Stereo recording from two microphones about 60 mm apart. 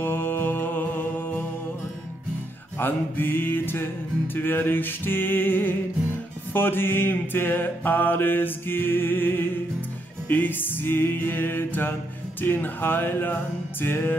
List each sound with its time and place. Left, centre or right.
0.0 s music: left
2.8 s mantra: left